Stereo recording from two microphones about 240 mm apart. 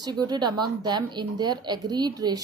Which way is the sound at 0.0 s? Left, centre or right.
Centre.